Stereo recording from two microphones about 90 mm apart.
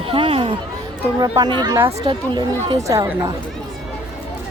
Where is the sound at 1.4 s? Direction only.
55° right (ahead or behind).